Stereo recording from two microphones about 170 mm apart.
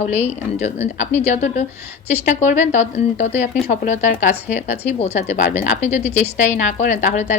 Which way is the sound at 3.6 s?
55° left (ahead or behind).